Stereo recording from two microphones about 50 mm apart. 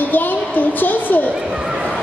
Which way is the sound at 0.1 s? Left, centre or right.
Left.